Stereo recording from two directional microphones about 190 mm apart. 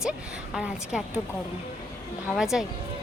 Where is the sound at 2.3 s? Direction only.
Centre (ahead or behind).